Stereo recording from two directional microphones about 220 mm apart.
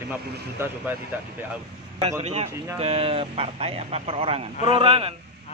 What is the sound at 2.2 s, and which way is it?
Speech, 30° right (ahead or behind).